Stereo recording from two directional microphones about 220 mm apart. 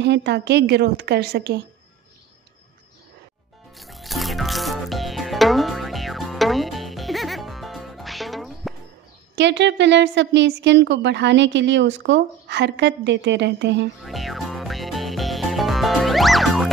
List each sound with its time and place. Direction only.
0.0 s a woman's voice: 50° right (ahead or behind)
3.7 s music: centre (ahead or behind)
9.3 s a woman's voice: 55° right (ahead or behind)
14.0 s music: centre (ahead or behind)